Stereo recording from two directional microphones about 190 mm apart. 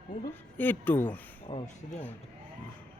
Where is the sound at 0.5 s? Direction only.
10° left (ahead or behind).